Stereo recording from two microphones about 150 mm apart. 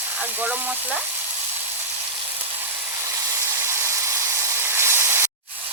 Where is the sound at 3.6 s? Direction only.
20° right (ahead or behind).